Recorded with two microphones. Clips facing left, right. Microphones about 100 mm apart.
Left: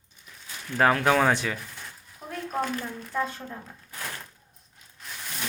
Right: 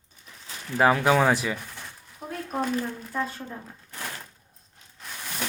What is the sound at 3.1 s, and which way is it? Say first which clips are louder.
Speech: left 1 dB; 10° right (ahead or behind).